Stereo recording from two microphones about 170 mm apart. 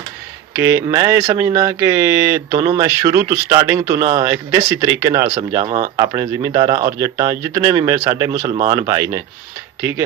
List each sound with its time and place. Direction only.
0.5 s speech: 15° right (ahead or behind)